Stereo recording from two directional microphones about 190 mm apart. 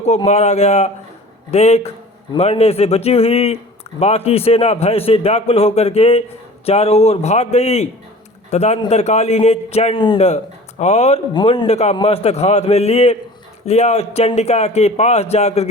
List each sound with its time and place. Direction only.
0.0 s speech: 35° left (ahead or behind)